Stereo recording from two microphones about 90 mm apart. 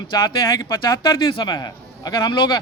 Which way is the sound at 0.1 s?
50° left (ahead or behind).